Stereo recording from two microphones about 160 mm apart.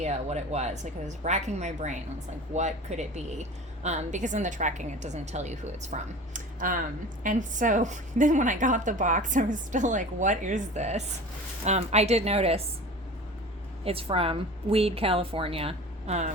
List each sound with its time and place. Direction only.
0.0 s a woman's voice: 45° right (ahead or behind)
13.8 s a woman's voice: 35° right (ahead or behind)